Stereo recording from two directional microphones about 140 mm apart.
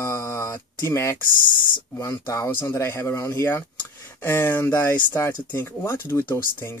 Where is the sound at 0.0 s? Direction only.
20° left (ahead or behind).